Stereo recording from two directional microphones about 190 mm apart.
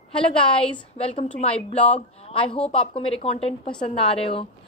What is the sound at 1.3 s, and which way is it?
A woman's voice, 30° left (ahead or behind).